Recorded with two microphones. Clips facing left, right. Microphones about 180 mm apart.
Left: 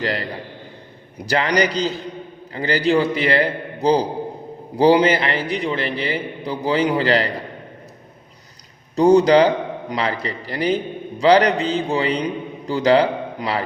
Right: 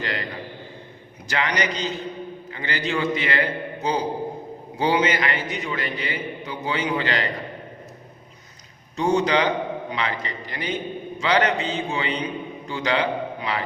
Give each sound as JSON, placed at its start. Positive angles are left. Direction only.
{"t": 0.0, "sound": "a man's voice", "side_deg": 35}
{"t": 1.3, "sound": "a man's voice", "side_deg": 35}
{"t": 9.0, "sound": "a man's voice", "side_deg": 40}